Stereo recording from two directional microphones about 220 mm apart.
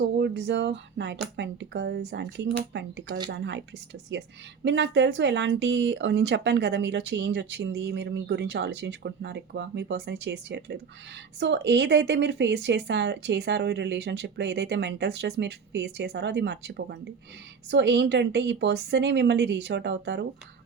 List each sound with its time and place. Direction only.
0.2 s speech: 55° right (ahead or behind)